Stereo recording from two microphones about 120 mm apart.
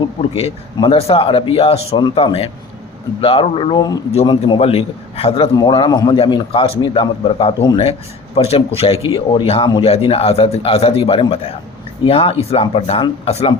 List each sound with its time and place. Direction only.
0.0 s a man's voice: 55° left (ahead or behind)
2.0 s a man's voice: 45° left (ahead or behind)
3.8 s speech: 30° left (ahead or behind)
4.3 s a man's voice: 45° left (ahead or behind)
9.8 s a man's voice: 60° left (ahead or behind)